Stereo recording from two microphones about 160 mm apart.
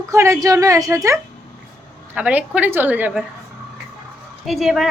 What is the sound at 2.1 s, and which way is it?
Speech, 10° right (ahead or behind).